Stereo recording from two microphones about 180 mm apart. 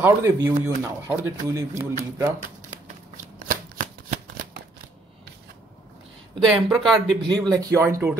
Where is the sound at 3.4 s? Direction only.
45° right (ahead or behind).